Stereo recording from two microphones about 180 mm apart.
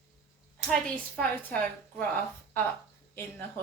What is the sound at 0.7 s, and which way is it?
Speech, 5° left (ahead or behind).